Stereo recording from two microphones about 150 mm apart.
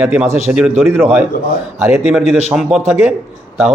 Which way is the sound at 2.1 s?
5° right (ahead or behind).